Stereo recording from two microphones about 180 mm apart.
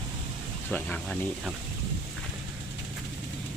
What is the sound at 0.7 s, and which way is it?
Speech, 5° left (ahead or behind).